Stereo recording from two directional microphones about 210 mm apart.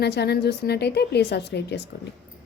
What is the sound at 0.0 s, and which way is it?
A woman's voice, 50° left (ahead or behind).